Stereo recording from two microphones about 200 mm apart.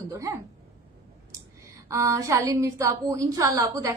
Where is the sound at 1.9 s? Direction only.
15° right (ahead or behind).